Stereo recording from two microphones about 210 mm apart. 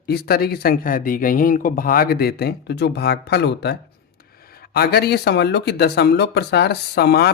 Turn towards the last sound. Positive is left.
turn(degrees=50)  # may be behind; listen again after turning